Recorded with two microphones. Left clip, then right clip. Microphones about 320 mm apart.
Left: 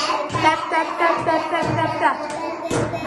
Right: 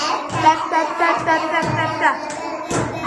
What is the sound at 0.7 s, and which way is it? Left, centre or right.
Speech, centre.